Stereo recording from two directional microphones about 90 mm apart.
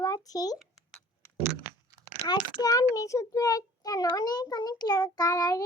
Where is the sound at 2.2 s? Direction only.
45° left (ahead or behind).